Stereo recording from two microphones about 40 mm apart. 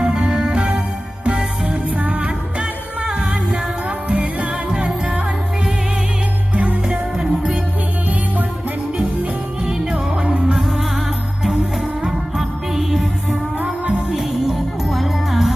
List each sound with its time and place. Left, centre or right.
0.0 s music: right
6.5 s music: right
7.2 s music: right
9.9 s music: right
10.6 s music: centre
12.0 s music: centre
14.1 s music: centre